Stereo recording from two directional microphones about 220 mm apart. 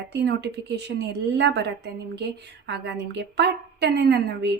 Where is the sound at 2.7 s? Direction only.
50° right (ahead or behind).